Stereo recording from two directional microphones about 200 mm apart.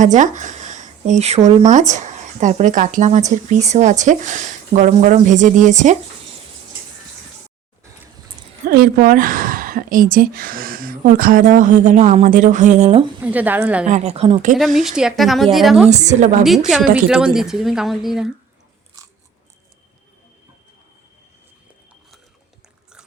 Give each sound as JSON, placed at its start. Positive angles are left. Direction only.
{"t": 0.0, "sound": "speech", "side_deg": -40}
{"t": 8.7, "sound": "a woman's voice", "side_deg": -45}
{"t": 13.2, "sound": "a woman's voice", "side_deg": -10}
{"t": 13.8, "sound": "speech", "side_deg": -35}
{"t": 14.8, "sound": "a woman's voice", "side_deg": -5}
{"t": 15.9, "sound": "speech", "side_deg": -35}
{"t": 16.4, "sound": "a woman's voice", "side_deg": 0}
{"t": 19.0, "sound": "biting", "side_deg": -15}